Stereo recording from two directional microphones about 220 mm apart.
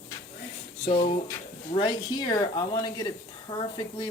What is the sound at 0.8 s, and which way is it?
A woman's voice, 30° left (ahead or behind).